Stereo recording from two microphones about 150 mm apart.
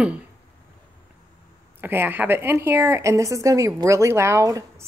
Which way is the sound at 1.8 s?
15° right (ahead or behind).